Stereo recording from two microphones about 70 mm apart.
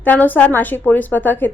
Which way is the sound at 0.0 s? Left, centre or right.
Left.